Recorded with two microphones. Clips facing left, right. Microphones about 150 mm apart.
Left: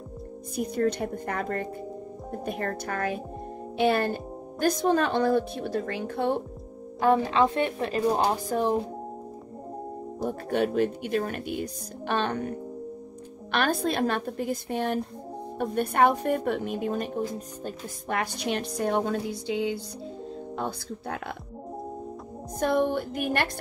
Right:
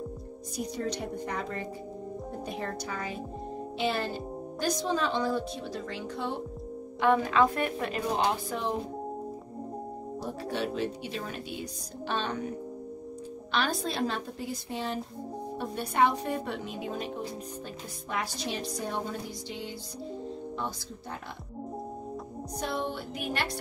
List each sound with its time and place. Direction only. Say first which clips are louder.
0.6 s a woman's voice: left 7 dB; 55° left (ahead or behind)
7.0 s a woman's voice: left 2 dB; 30° left (ahead or behind)
10.2 s a woman's voice: left 7 dB; 50° left (ahead or behind)
22.6 s a woman's voice: left 9 dB; 50° left (ahead or behind)